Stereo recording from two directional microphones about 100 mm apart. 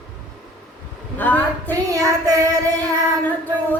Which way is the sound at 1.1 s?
15° left (ahead or behind).